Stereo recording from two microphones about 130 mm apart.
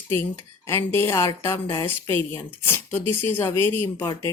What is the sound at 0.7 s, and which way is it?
Speech, 20° left (ahead or behind).